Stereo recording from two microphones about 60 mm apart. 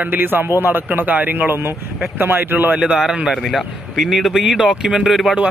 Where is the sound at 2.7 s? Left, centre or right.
Centre.